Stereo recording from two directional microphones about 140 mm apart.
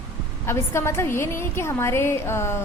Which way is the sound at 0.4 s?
15° left (ahead or behind).